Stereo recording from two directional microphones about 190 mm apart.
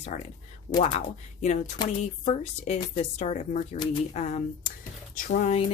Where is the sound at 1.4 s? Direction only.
35° left (ahead or behind).